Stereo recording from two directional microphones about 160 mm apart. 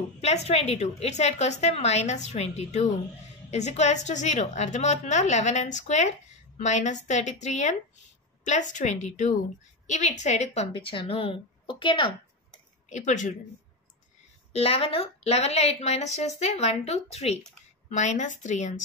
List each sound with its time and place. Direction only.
0.2 s a woman's voice: 40° left (ahead or behind)
12.9 s a woman's voice: 50° left (ahead or behind)
14.5 s a woman's voice: 35° left (ahead or behind)